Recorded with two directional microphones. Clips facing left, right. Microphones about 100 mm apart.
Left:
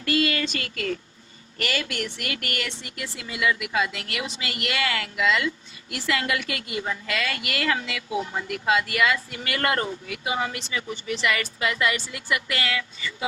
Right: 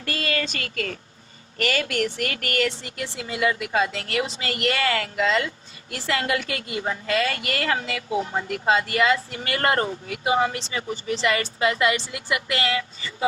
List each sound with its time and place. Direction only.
0.0 s a woman's voice: 35° right (ahead or behind)